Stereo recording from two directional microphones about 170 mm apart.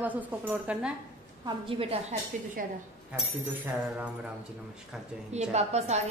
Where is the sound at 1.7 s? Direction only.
35° right (ahead or behind).